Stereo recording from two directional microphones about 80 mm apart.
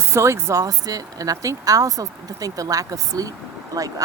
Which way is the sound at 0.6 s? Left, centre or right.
Right.